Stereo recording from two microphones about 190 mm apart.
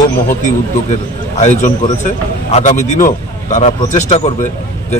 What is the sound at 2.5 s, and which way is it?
Speech, 40° left (ahead or behind).